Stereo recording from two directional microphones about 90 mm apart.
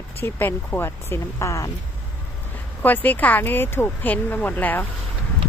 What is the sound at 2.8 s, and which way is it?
Speech, 20° left (ahead or behind).